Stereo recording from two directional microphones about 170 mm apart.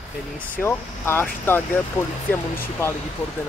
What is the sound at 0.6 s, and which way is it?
Speech, 15° left (ahead or behind).